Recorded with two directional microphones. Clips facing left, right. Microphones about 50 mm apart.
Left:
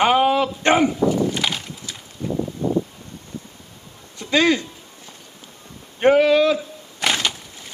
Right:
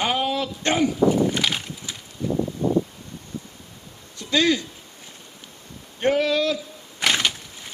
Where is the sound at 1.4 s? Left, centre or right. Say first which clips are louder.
Even; centre.